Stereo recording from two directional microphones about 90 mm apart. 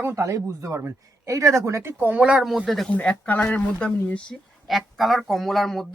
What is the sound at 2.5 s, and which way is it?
Speech, centre (ahead or behind).